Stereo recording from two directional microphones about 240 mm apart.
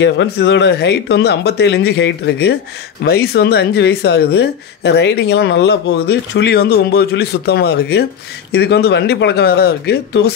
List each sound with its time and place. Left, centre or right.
0.0 s speech: left